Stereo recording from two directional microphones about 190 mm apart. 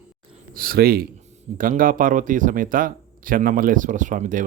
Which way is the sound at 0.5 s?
50° right (ahead or behind).